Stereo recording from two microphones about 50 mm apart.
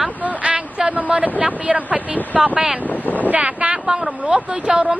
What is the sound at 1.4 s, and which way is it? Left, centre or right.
A woman's voice, right.